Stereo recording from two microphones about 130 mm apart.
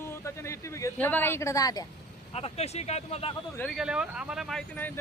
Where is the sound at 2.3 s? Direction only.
55° left (ahead or behind).